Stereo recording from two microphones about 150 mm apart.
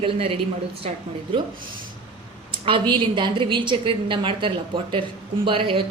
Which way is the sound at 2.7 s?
35° right (ahead or behind).